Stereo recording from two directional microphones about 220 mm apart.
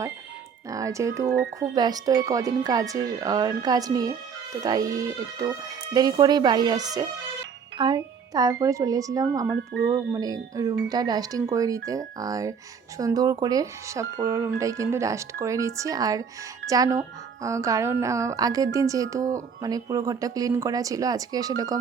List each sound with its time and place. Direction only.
0.7 s speech: 15° right (ahead or behind)